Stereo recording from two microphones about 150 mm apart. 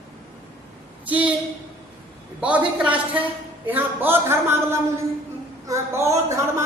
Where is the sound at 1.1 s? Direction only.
10° right (ahead or behind).